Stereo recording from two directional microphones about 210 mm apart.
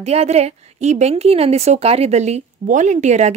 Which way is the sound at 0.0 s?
30° right (ahead or behind).